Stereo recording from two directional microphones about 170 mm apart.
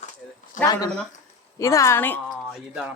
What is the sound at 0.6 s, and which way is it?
Speech, 20° left (ahead or behind).